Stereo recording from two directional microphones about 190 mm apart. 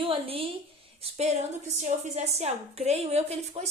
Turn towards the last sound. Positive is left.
turn(degrees=-35)  # may be behind; listen again after turning